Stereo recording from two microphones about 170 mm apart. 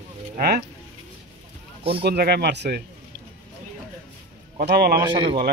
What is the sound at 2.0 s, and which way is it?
Speech, 70° right (ahead or behind).